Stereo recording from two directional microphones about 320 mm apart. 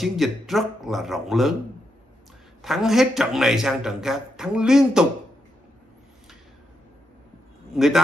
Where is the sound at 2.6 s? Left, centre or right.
Centre.